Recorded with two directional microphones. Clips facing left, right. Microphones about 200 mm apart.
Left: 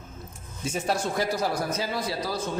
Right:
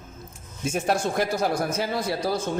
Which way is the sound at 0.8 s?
50° right (ahead or behind).